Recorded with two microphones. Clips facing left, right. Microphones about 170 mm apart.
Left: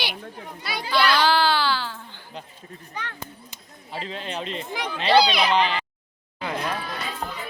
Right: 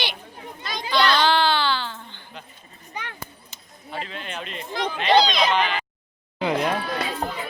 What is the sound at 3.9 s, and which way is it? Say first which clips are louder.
Speech: left 1 dB; 30° left (ahead or behind).